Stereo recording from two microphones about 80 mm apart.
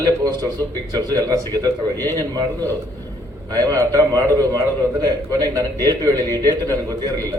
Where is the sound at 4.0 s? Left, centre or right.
Left.